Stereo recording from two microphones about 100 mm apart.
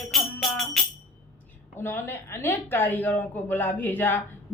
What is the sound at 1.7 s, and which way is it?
A woman's voice, 25° left (ahead or behind).